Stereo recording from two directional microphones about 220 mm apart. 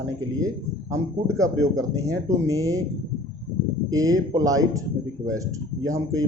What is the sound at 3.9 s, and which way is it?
Speech, 15° right (ahead or behind).